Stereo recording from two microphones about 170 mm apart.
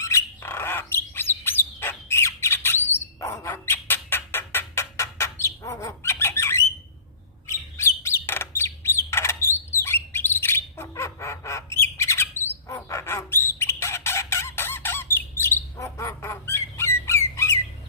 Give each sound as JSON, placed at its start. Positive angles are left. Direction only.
{"t": 0.0, "sound": "bird", "side_deg": 15}
{"t": 12.6, "sound": "chicken", "side_deg": 15}
{"t": 15.8, "sound": "squawk", "side_deg": 15}